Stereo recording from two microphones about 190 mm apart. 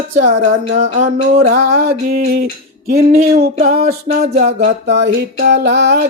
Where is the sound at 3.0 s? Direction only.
40° right (ahead or behind).